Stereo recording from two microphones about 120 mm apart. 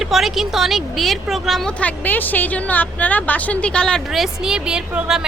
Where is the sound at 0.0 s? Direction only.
Centre (ahead or behind).